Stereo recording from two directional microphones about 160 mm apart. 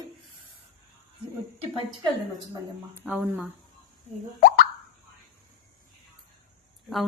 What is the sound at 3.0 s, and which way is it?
Speech, 10° right (ahead or behind).